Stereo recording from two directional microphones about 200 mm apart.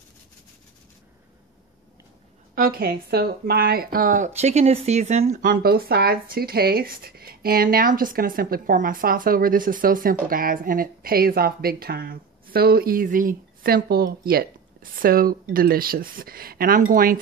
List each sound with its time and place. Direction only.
2.5 s speech: 45° right (ahead or behind)